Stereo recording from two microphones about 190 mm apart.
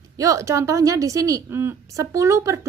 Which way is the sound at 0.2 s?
15° right (ahead or behind).